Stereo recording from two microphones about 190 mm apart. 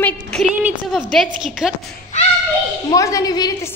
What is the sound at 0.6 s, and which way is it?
A woman's voice, 5° right (ahead or behind).